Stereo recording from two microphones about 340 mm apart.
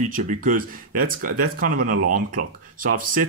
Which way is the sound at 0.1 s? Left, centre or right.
Right.